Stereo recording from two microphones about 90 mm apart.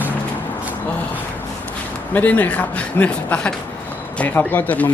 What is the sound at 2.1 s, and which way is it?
A man's voice, 15° left (ahead or behind).